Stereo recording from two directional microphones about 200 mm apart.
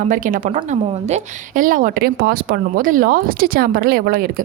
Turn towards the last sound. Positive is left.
turn(degrees=-45)  # may be behind; listen again after turning